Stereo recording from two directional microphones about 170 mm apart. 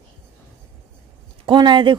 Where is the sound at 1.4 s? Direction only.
25° right (ahead or behind).